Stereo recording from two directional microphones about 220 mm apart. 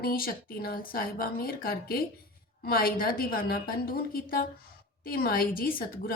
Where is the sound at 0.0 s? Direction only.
40° left (ahead or behind).